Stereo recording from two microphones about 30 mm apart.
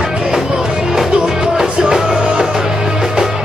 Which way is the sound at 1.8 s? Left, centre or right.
Right.